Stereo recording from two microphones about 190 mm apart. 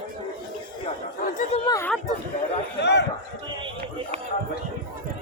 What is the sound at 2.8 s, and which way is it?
Speech, 65° left (ahead or behind).